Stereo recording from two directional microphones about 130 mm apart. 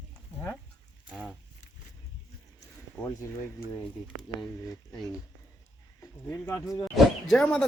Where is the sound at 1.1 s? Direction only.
Centre (ahead or behind).